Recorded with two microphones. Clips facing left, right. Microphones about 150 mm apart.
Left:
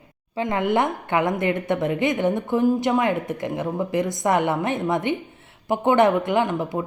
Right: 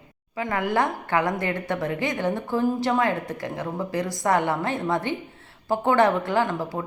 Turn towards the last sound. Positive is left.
turn(degrees=20)  # may be behind; listen again after turning